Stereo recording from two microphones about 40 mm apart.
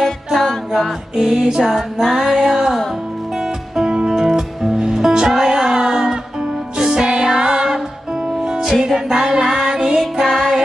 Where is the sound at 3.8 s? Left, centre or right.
Centre.